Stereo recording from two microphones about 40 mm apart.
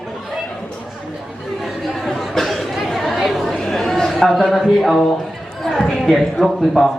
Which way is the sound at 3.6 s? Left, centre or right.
Centre.